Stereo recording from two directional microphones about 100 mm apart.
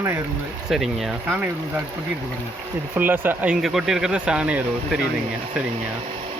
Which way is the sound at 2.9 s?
20° right (ahead or behind).